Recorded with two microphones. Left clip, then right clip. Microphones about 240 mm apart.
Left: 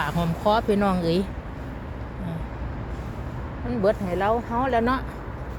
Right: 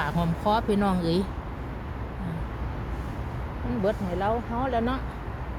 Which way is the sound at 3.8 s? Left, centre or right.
Left.